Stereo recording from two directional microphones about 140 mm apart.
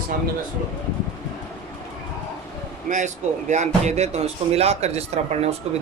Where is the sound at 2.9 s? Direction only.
70° right (ahead or behind).